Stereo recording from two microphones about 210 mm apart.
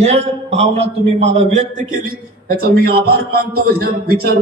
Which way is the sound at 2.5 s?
45° right (ahead or behind).